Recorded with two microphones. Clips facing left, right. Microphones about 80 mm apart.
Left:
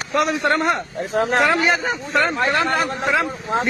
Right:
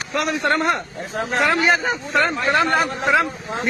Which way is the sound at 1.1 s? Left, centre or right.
Left.